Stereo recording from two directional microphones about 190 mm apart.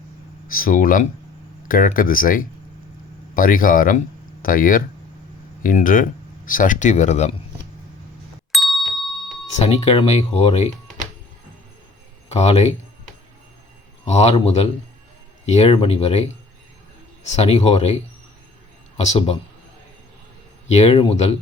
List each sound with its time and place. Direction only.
0.4 s speech: 50° left (ahead or behind)
8.5 s ding: centre (ahead or behind)
9.6 s speech: 35° left (ahead or behind)
12.3 s speech: 35° left (ahead or behind)
14.0 s speech: 35° left (ahead or behind)
20.7 s speech: 35° left (ahead or behind)